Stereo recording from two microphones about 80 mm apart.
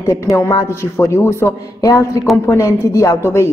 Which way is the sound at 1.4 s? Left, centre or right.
Left.